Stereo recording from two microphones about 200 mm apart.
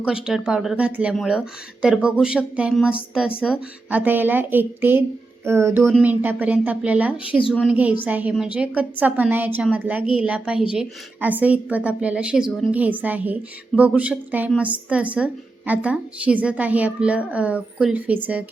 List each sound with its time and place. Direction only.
0.0 s a woman's voice: 5° right (ahead or behind)
7.3 s a woman's voice: 25° left (ahead or behind)
7.6 s a woman's voice: 5° right (ahead or behind)